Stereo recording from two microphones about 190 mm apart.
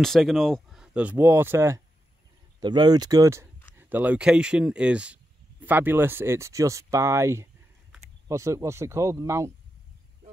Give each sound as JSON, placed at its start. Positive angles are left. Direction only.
{"t": 0.0, "sound": "speech", "side_deg": 0}